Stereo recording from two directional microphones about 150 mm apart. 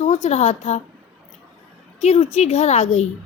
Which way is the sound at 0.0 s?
45° left (ahead or behind).